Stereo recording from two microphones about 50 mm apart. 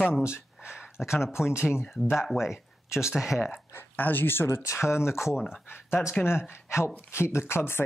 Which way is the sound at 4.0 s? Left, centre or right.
Left.